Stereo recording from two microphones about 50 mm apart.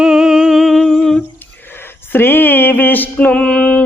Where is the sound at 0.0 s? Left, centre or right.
Centre.